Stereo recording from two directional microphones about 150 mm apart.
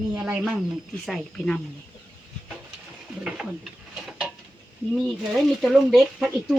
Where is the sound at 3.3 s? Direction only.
5° right (ahead or behind).